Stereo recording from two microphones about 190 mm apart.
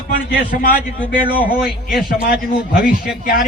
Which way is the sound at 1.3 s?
5° right (ahead or behind).